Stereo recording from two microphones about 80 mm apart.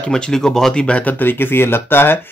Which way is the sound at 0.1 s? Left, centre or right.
Centre.